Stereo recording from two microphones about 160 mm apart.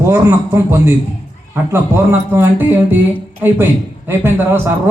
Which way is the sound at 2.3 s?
15° right (ahead or behind).